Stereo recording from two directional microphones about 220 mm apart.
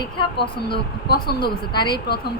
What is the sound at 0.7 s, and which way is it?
Speech, 45° left (ahead or behind).